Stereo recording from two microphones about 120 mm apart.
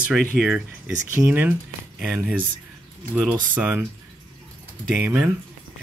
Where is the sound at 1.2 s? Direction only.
15° right (ahead or behind).